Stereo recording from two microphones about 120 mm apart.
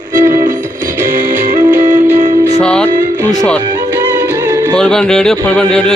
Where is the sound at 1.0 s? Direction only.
90° right.